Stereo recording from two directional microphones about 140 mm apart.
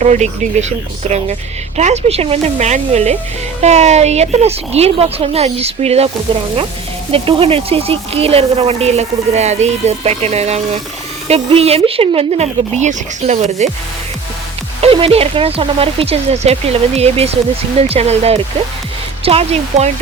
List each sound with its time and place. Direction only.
0.0 s speech: 55° right (ahead or behind)
7.1 s speech: 40° right (ahead or behind)
14.8 s speech: 45° right (ahead or behind)